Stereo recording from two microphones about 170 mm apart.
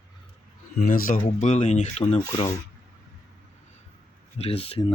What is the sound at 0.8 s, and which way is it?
Speech, 55° left (ahead or behind).